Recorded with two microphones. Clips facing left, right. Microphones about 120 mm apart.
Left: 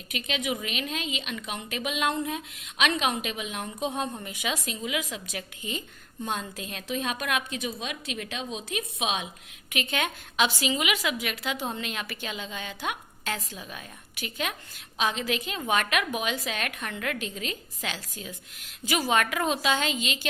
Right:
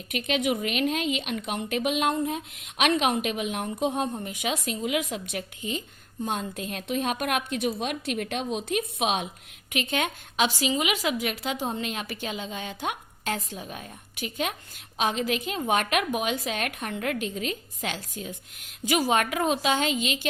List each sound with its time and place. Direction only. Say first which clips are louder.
0.1 s a woman's voice: right 5 dB; 50° right (ahead or behind)